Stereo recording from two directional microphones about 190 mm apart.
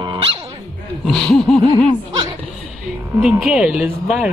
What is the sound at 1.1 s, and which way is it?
Speech, centre (ahead or behind).